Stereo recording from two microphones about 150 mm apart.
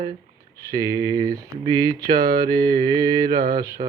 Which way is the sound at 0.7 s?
20° right (ahead or behind).